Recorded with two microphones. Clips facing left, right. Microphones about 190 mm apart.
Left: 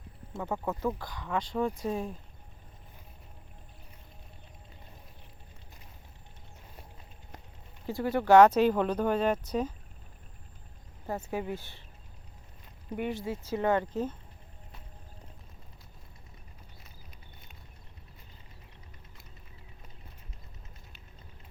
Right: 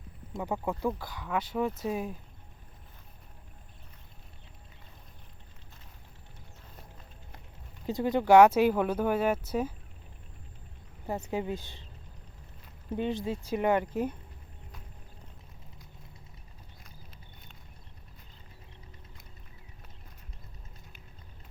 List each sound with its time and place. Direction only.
0.3 s speech: 15° right (ahead or behind)
7.9 s speech: 20° right (ahead or behind)
11.0 s speech: 15° right (ahead or behind)
13.0 s speech: 20° right (ahead or behind)